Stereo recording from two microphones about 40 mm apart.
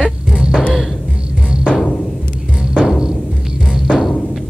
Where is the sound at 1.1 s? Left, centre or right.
Centre.